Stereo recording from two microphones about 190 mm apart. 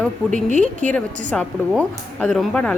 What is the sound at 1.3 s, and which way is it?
A woman's voice, 5° left (ahead or behind).